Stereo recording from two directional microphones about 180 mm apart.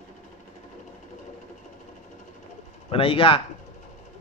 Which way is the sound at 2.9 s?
30° left (ahead or behind).